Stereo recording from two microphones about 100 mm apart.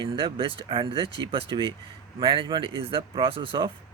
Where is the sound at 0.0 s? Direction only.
55° right (ahead or behind).